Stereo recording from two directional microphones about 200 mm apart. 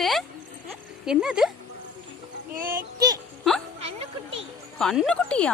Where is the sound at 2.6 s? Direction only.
15° right (ahead or behind).